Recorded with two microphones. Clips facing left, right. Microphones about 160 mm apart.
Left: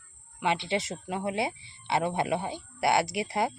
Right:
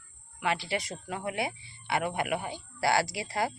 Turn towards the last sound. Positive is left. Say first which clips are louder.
# left 3 dB
turn(degrees=25)  # may be behind; listen again after turning